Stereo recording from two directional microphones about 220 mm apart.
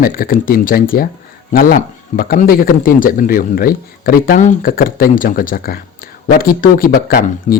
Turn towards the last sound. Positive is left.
turn(degrees=40)  # may be behind; listen again after turning